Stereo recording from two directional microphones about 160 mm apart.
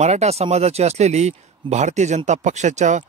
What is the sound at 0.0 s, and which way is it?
Speech, 45° right (ahead or behind).